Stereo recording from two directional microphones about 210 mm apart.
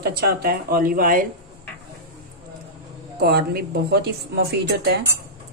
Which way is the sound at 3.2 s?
50° right (ahead or behind).